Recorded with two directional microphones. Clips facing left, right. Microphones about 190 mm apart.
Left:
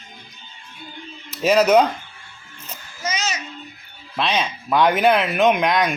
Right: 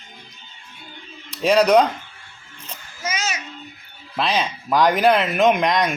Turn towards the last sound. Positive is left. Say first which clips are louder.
# even
turn(degrees=0)  # may be behind; listen again after turning